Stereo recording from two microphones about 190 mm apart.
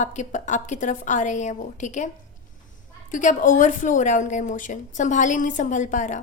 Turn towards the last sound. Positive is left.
turn(degrees=40)  # may be behind; listen again after turning